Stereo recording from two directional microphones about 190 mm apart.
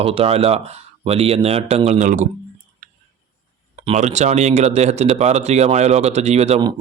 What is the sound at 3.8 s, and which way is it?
Speech, 35° right (ahead or behind).